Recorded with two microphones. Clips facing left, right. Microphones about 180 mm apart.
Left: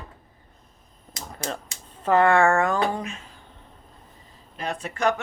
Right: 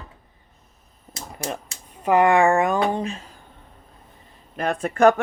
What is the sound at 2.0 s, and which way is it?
Speech, 15° right (ahead or behind).